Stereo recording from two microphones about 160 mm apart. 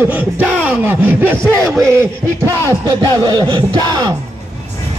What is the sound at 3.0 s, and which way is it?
Music, 25° right (ahead or behind).